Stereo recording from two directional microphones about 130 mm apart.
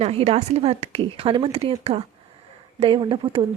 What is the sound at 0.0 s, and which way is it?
A woman's voice, 50° right (ahead or behind).